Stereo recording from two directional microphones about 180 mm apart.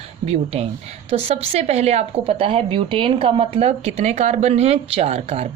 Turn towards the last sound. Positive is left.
turn(degrees=-35)  # may be behind; listen again after turning